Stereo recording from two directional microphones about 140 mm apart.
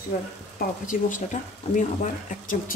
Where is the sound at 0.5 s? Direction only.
75° left (ahead or behind).